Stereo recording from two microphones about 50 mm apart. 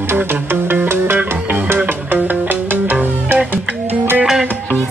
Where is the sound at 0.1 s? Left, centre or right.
Right.